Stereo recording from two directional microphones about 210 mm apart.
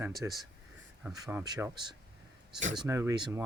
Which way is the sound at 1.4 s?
20° right (ahead or behind).